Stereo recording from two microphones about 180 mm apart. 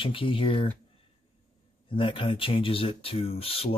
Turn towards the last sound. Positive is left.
turn(degrees=30)  # may be behind; listen again after turning